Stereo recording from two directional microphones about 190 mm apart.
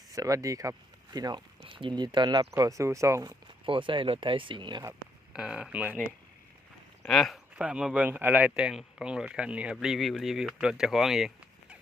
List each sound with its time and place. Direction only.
0.1 s speech: 15° right (ahead or behind)
3.7 s speech: 25° right (ahead or behind)
5.3 s speech: 5° right (ahead or behind)
7.0 s speech: centre (ahead or behind)